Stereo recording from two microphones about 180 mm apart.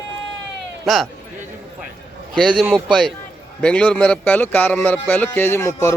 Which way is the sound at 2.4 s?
5° left (ahead or behind).